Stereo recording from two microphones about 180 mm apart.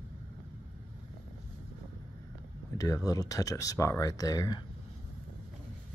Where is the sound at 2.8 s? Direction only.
20° left (ahead or behind).